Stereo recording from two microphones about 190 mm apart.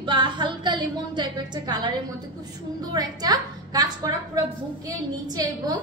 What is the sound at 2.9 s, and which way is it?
A woman's voice, 20° right (ahead or behind).